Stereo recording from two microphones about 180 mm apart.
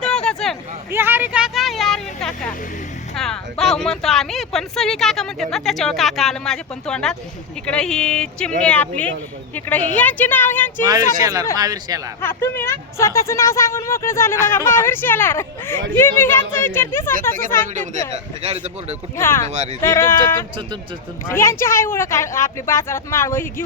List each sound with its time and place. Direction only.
0.0 s a sound: 5° left (ahead or behind)
0.9 s a sound: 10° right (ahead or behind)
3.2 s speech: centre (ahead or behind)
11.2 s speech: 20° right (ahead or behind)
12.2 s speech: 10° left (ahead or behind)
18.4 s a man's voice: 35° right (ahead or behind)
19.1 s speech: 15° left (ahead or behind)